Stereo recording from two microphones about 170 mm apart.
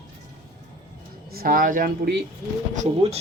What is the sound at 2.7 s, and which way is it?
Speech, 40° right (ahead or behind).